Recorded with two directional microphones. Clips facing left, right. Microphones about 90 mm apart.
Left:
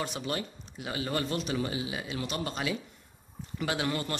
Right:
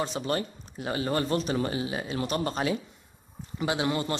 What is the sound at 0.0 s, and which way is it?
Speech, 35° right (ahead or behind).